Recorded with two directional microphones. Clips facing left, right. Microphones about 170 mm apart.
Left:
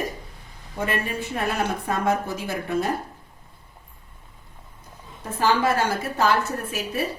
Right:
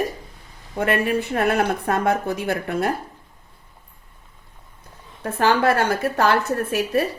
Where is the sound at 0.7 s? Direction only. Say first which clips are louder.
Right 6 dB; 60° right (ahead or behind).